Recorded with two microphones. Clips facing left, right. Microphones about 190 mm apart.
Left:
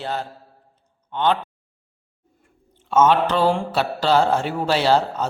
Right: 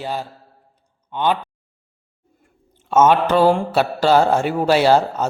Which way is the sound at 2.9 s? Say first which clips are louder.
Right 2 dB; 50° right (ahead or behind).